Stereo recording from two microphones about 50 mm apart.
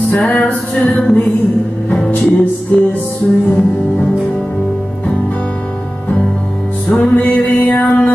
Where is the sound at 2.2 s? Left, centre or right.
Left.